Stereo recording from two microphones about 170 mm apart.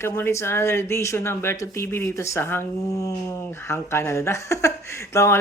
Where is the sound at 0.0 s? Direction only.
15° left (ahead or behind).